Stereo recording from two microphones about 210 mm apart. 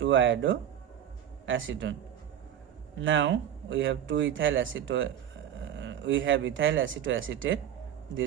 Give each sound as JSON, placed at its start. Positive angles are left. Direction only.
{"t": 0.0, "sound": "speech", "side_deg": -65}
{"t": 3.0, "sound": "speech", "side_deg": -65}